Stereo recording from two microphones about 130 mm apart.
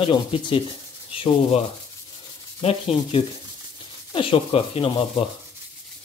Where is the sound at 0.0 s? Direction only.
40° left (ahead or behind).